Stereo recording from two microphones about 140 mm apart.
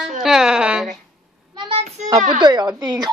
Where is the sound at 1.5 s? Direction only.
35° right (ahead or behind).